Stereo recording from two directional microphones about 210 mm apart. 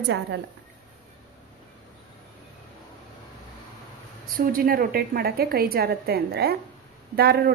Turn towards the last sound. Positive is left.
turn(degrees=-50)  # may be behind; listen again after turning